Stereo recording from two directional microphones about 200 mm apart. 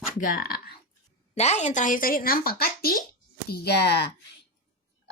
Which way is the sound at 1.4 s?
35° left (ahead or behind).